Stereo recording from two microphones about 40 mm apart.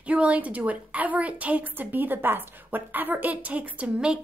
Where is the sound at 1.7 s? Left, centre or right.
Right.